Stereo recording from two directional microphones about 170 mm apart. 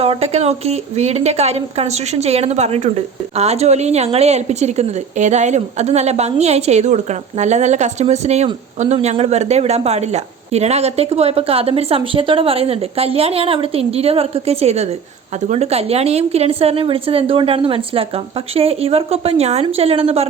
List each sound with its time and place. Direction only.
0.0 s a woman's voice: 35° right (ahead or behind)